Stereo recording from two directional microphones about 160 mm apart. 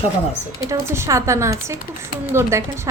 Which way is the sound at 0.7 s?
15° right (ahead or behind).